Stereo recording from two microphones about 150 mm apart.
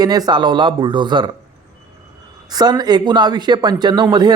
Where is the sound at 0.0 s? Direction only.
25° right (ahead or behind).